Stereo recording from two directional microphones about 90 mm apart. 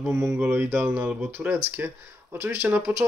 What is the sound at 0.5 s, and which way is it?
Speech, 20° right (ahead or behind).